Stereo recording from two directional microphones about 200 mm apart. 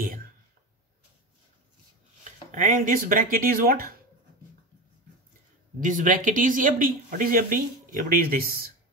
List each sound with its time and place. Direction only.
0.0 s a sound: 45° right (ahead or behind)
2.5 s speech: 40° right (ahead or behind)
5.8 s speech: 40° right (ahead or behind)